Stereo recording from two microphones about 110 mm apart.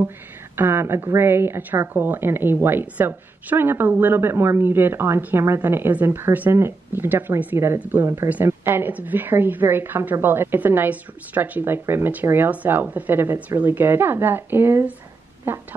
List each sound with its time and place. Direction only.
0.6 s a woman's voice: 20° right (ahead or behind)